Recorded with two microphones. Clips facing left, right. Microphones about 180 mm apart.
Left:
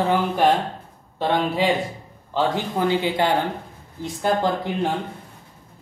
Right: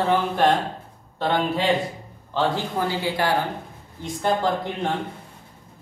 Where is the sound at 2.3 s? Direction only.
20° left (ahead or behind).